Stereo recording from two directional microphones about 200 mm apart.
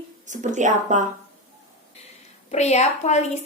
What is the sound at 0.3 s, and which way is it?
Speech, 40° right (ahead or behind).